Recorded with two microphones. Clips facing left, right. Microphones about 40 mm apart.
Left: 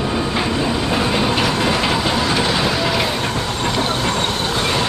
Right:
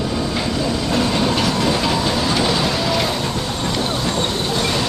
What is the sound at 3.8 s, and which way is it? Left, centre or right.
Vehicle, left.